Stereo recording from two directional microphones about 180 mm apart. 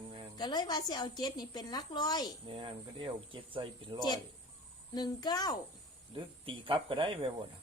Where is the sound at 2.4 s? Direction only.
30° right (ahead or behind).